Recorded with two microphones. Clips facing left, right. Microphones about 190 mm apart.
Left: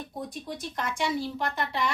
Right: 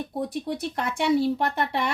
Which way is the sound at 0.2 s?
65° right (ahead or behind).